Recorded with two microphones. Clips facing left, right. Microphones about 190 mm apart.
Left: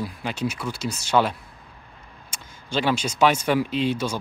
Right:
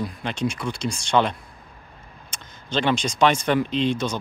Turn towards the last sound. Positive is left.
turn(degrees=10)  # may be behind; listen again after turning